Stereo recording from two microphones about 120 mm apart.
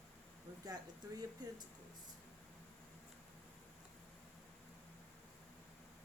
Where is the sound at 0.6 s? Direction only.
35° right (ahead or behind).